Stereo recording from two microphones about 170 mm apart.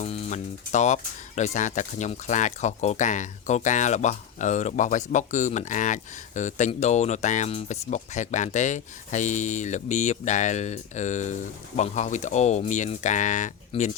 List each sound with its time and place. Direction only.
0.0 s speech: 40° left (ahead or behind)